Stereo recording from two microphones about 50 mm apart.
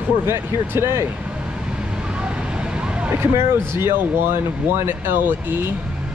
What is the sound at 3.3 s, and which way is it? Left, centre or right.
Speech, right.